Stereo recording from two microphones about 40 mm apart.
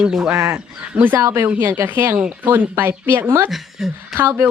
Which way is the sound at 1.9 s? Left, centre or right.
Right.